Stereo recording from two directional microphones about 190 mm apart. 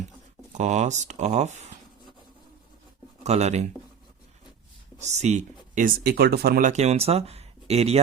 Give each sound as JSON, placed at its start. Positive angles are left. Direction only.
{"t": 0.5, "sound": "speech", "side_deg": -40}
{"t": 3.2, "sound": "speech", "side_deg": -35}
{"t": 5.0, "sound": "speech", "side_deg": -35}